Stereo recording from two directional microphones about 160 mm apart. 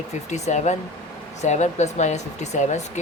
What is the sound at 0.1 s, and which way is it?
Speech, 45° left (ahead or behind).